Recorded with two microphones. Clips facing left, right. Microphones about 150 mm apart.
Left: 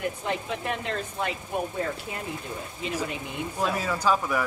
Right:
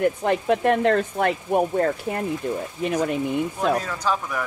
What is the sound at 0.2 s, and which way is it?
Speech, 60° right (ahead or behind).